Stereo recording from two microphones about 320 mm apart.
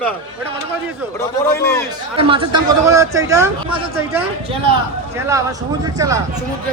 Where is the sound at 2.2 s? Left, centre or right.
Centre.